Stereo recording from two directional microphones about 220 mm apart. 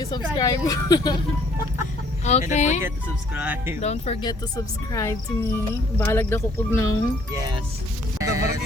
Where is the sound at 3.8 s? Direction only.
30° left (ahead or behind).